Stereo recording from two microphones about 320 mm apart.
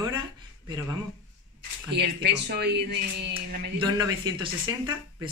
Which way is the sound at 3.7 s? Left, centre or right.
Centre.